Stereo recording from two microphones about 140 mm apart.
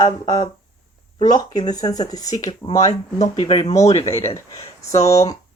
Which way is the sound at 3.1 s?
50° left (ahead or behind).